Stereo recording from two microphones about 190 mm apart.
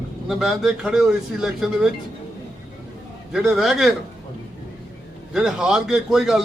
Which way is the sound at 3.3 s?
Centre (ahead or behind).